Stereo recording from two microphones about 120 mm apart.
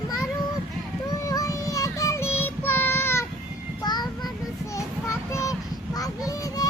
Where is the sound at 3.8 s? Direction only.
35° left (ahead or behind).